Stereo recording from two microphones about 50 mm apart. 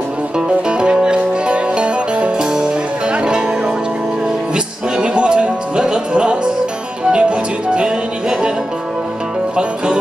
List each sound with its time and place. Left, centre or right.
0.7 s music: centre
4.9 s music: right